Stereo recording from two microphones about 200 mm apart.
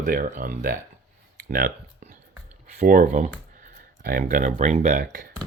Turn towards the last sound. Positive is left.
turn(degrees=-40)  # may be behind; listen again after turning